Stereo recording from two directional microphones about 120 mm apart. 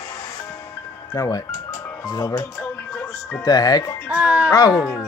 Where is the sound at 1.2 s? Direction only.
30° left (ahead or behind).